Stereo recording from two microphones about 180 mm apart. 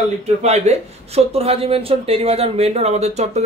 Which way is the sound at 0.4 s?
40° right (ahead or behind).